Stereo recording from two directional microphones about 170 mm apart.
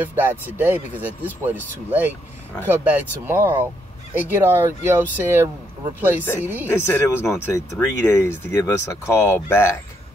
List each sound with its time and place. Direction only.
0.0 s speech: 10° right (ahead or behind)
6.7 s speech: 15° left (ahead or behind)